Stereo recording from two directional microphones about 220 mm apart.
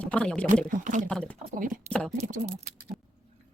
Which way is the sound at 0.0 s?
5° left (ahead or behind).